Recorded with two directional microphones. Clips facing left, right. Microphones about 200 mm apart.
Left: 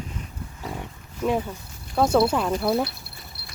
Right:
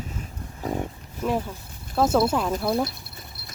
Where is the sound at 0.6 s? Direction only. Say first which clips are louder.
Right 7 dB; 40° right (ahead or behind).